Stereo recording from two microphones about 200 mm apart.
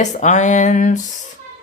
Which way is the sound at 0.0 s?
35° left (ahead or behind).